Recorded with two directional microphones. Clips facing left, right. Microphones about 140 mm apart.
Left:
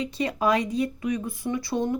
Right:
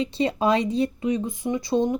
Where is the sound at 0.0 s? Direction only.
25° right (ahead or behind).